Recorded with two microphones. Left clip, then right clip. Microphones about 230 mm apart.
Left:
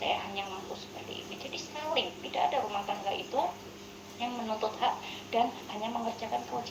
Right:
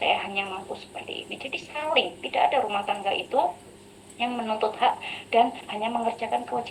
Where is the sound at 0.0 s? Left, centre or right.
Right.